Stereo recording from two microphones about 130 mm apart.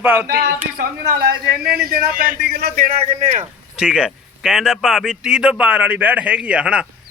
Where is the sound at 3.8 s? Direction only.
5° right (ahead or behind).